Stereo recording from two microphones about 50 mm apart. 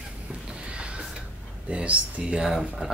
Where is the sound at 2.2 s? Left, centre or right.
Centre.